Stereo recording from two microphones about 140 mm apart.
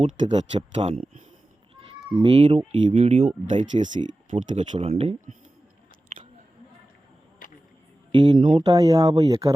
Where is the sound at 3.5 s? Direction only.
60° right (ahead or behind).